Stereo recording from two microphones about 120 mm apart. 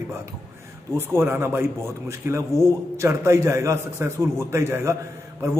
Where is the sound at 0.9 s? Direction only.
20° right (ahead or behind).